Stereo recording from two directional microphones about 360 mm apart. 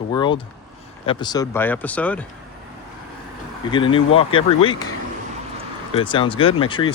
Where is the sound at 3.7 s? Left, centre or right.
Centre.